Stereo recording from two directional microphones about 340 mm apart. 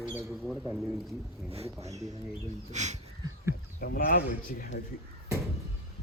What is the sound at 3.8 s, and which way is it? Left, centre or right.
A man's voice, left.